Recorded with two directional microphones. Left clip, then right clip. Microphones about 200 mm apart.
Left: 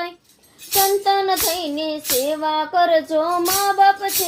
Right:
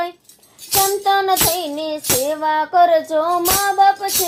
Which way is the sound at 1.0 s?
15° right (ahead or behind).